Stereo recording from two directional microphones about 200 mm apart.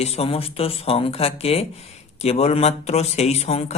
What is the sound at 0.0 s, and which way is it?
Speech, 30° left (ahead or behind).